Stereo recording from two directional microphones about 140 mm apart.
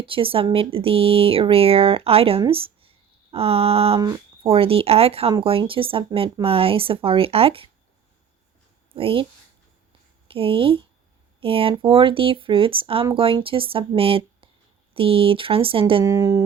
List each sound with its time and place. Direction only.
0.0 s speech: 40° right (ahead or behind)
8.9 s speech: 40° right (ahead or behind)
10.2 s speech: 40° right (ahead or behind)
16.0 s speech: 20° right (ahead or behind)